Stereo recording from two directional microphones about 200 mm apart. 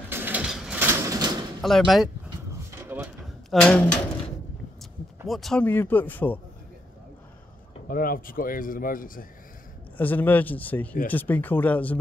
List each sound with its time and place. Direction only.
0.1 s a sound: 10° right (ahead or behind)
1.6 s speech: centre (ahead or behind)
2.8 s drawer open or close: 10° right (ahead or behind)
3.4 s speech: 5° left (ahead or behind)
5.3 s speech: centre (ahead or behind)
7.9 s a man's voice: 45° left (ahead or behind)
9.9 s speech: 10° left (ahead or behind)